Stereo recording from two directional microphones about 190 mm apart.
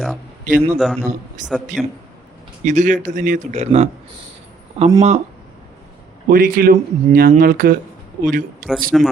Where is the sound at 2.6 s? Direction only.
40° right (ahead or behind).